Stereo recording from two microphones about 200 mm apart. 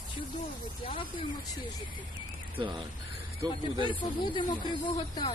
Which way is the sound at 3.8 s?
25° left (ahead or behind).